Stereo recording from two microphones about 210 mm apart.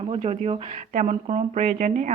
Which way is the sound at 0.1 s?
30° right (ahead or behind).